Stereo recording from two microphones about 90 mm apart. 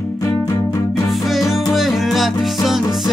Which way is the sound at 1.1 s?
Centre (ahead or behind).